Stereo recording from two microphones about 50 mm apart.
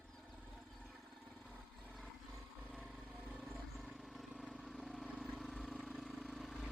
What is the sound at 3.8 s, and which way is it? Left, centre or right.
Vehicle, centre.